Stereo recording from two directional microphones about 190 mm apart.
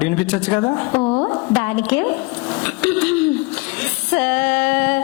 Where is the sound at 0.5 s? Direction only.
25° left (ahead or behind).